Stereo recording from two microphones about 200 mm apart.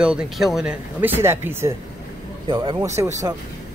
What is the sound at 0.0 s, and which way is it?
Speech, 5° right (ahead or behind).